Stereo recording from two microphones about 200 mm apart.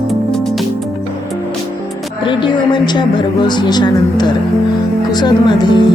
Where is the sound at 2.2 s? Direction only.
25° left (ahead or behind).